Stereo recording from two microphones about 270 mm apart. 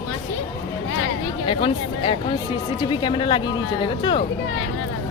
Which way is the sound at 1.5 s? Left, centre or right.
Centre.